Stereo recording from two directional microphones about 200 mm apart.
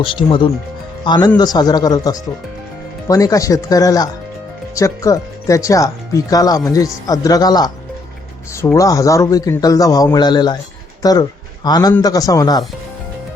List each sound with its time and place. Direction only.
0.0 s speech: 25° left (ahead or behind)